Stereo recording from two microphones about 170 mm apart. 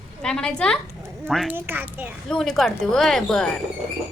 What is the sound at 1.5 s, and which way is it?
Speech, 10° right (ahead or behind).